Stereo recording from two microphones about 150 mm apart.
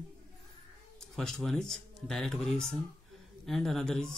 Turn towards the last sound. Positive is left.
turn(degrees=5)  # may be behind; listen again after turning